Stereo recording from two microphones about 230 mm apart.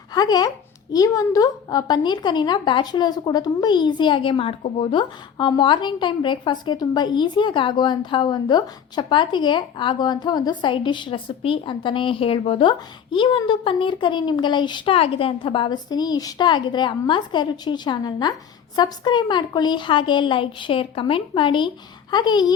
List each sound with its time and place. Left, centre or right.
0.1 s a woman's voice: centre